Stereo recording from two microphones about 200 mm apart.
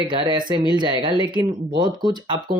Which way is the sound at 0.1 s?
25° right (ahead or behind).